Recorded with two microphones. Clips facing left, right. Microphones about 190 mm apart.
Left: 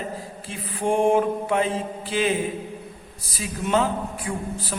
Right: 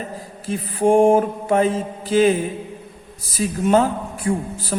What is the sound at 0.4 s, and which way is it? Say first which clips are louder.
A man's voice: right 8 dB; 40° right (ahead or behind).